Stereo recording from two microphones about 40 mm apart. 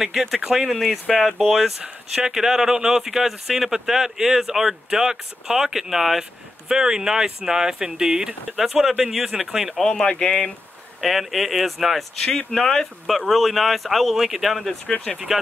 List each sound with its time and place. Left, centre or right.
0.0 s speech: centre
2.1 s speech: centre
8.5 s speech: centre
9.8 s speech: centre
11.0 s speech: centre
12.3 s speech: centre